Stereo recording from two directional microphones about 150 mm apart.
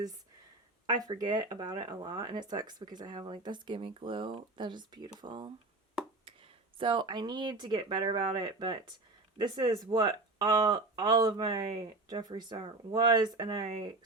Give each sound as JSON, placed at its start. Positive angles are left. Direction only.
{"t": 0.9, "sound": "speech", "side_deg": -25}
{"t": 6.7, "sound": "speech", "side_deg": -35}